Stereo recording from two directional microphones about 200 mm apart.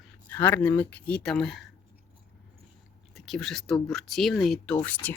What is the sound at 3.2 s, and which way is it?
Speech, centre (ahead or behind).